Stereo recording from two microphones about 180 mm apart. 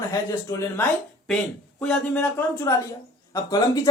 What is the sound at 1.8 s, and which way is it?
Speech, 5° left (ahead or behind).